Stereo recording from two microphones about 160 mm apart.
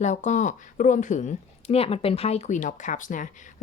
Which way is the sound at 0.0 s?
50° left (ahead or behind).